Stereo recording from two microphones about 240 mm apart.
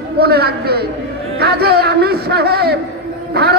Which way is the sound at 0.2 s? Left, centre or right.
Right.